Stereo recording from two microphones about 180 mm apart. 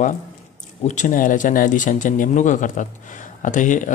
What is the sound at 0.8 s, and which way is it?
Speech, 45° left (ahead or behind).